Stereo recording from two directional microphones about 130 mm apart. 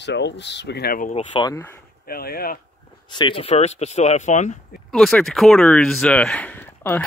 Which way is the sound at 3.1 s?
35° left (ahead or behind).